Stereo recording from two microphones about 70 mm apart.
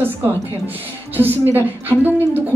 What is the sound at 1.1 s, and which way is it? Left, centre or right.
A woman's voice, right.